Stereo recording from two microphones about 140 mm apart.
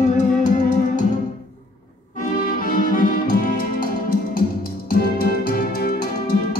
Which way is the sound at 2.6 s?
80° left.